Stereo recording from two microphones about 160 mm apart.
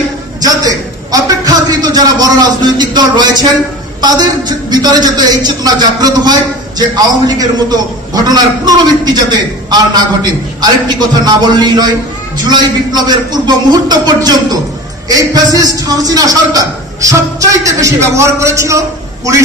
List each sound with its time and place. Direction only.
0.4 s a man's voice: 25° right (ahead or behind)